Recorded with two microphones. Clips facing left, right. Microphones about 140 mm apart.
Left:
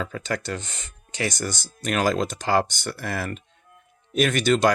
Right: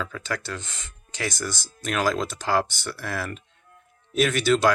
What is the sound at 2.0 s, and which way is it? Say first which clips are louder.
Speech: left 2 dB; 55° left (ahead or behind).